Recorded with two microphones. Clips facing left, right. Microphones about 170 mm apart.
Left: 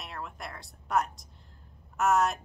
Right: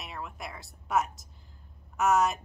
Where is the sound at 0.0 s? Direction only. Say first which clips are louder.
Even; centre (ahead or behind).